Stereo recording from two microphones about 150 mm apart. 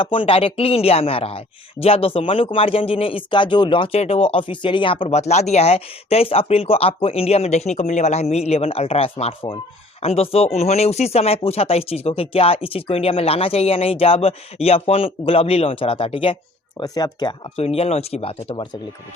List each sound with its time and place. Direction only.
0.0 s speech: 35° left (ahead or behind)
16.8 s speech: 25° left (ahead or behind)
17.6 s speech: 45° left (ahead or behind)